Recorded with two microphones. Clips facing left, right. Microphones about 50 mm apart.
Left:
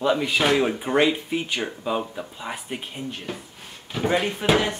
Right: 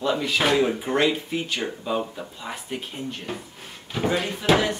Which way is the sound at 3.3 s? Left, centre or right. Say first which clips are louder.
Right 1 dB; centre.